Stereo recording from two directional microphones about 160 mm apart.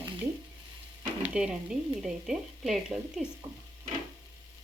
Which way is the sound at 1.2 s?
5° right (ahead or behind).